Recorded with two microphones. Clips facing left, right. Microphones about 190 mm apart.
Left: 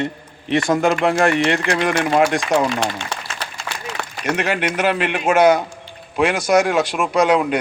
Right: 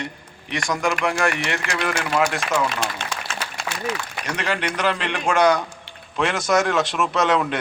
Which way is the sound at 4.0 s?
65° left (ahead or behind).